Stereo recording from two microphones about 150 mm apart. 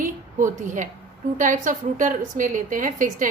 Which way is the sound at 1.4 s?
60° right (ahead or behind).